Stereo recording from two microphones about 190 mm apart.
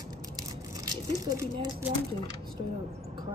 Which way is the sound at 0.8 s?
20° right (ahead or behind).